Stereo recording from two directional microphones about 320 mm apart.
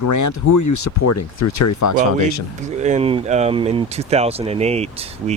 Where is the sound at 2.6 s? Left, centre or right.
Right.